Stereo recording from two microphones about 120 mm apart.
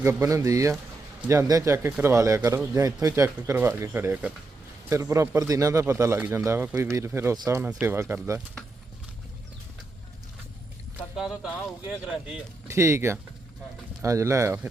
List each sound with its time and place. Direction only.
0.0 s speech: 25° right (ahead or behind)
11.2 s speech: 5° right (ahead or behind)
12.6 s speech: 25° right (ahead or behind)